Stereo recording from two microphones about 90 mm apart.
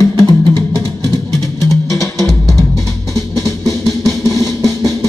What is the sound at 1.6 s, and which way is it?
Music, 35° left (ahead or behind).